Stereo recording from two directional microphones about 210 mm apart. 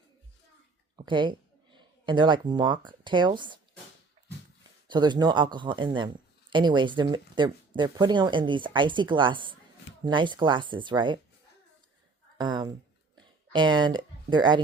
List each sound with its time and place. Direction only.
0.9 s speech: 20° right (ahead or behind)
4.9 s speech: 20° right (ahead or behind)
12.4 s speech: 20° right (ahead or behind)